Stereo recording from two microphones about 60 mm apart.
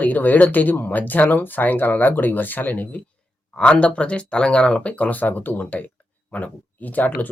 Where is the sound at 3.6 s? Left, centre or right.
Centre.